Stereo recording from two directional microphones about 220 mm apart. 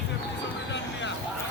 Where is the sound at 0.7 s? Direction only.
55° left (ahead or behind).